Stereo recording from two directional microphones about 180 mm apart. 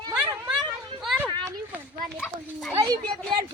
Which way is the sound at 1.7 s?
10° right (ahead or behind).